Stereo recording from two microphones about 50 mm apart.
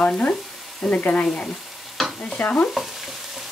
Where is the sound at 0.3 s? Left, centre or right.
Left.